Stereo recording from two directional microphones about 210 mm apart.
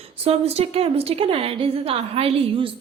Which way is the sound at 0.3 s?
30° right (ahead or behind).